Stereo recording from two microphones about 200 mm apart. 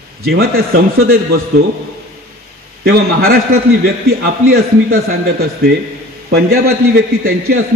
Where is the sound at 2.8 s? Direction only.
50° right (ahead or behind).